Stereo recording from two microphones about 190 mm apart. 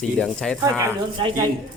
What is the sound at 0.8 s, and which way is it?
Speech, 20° right (ahead or behind).